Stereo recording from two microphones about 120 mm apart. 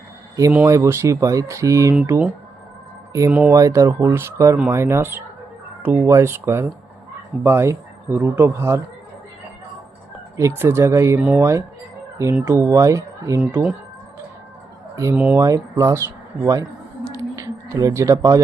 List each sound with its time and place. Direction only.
0.7 s speech: 25° right (ahead or behind)
2.0 s speech: 15° right (ahead or behind)
3.1 s speech: 25° right (ahead or behind)
10.3 s speech: 20° right (ahead or behind)
13.4 s speech: 10° right (ahead or behind)
15.1 s speech: 10° right (ahead or behind)
15.4 s speech: 30° right (ahead or behind)